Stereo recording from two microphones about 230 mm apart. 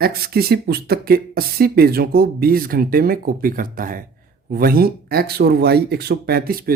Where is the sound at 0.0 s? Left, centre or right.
Right.